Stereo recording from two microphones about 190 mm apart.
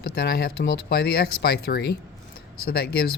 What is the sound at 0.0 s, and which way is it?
Speech, 55° left (ahead or behind).